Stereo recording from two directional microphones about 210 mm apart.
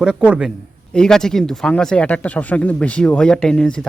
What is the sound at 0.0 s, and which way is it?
Speech, 5° right (ahead or behind).